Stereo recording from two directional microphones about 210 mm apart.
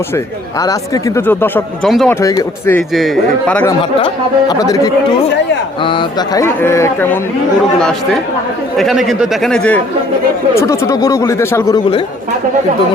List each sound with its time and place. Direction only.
0.6 s speech: 15° left (ahead or behind)
2.9 s speech: centre (ahead or behind)
3.8 s speech: 20° left (ahead or behind)